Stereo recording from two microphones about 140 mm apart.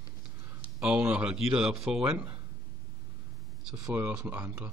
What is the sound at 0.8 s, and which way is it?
Speech, 5° right (ahead or behind).